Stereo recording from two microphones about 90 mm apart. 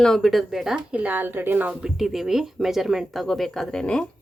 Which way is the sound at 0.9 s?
20° right (ahead or behind).